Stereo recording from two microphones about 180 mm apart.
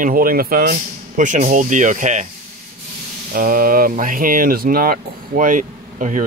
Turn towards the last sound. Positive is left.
turn(degrees=-45)  # may be behind; listen again after turning